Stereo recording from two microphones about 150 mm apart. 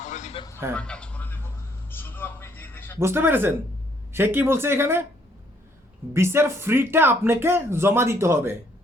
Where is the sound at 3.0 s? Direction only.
15° right (ahead or behind).